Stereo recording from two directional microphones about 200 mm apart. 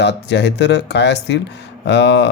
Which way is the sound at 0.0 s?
60° left (ahead or behind).